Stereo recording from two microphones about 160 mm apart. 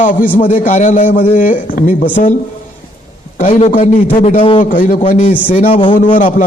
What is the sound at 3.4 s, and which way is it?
Speech, 50° left (ahead or behind).